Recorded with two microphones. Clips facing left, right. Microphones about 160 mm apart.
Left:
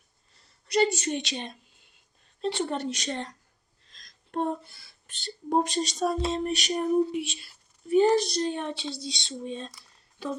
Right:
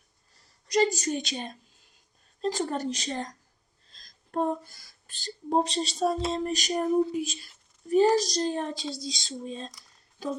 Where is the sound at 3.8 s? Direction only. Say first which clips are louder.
Left 1 dB; 35° right (ahead or behind).